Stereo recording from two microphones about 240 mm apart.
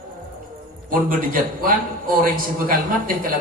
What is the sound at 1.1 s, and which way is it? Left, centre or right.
A man's voice, right.